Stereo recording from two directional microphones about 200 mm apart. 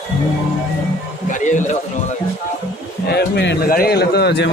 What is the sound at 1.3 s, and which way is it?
Speech, 40° left (ahead or behind).